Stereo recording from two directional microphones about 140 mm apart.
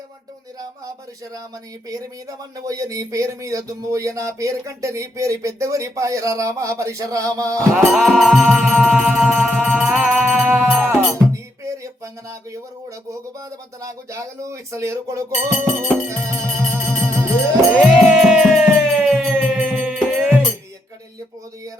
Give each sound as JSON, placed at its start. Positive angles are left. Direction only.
{"t": 1.9, "sound": "speech", "side_deg": -25}
{"t": 7.9, "sound": "music", "side_deg": 0}
{"t": 11.6, "sound": "a sound", "side_deg": -20}
{"t": 13.8, "sound": "speech", "side_deg": -20}
{"t": 15.8, "sound": "music", "side_deg": -20}
{"t": 17.7, "sound": "music", "side_deg": -5}